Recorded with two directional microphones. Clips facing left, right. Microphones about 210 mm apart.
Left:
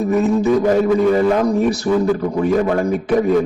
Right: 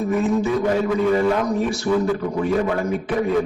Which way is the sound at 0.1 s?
40° left (ahead or behind).